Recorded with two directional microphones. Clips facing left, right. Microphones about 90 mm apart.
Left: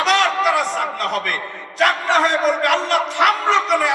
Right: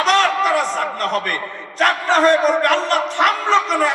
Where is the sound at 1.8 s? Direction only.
40° right (ahead or behind).